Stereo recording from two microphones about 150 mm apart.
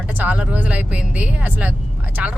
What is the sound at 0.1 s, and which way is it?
Speech, 10° right (ahead or behind).